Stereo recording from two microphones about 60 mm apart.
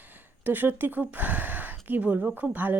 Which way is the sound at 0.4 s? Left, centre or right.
Right.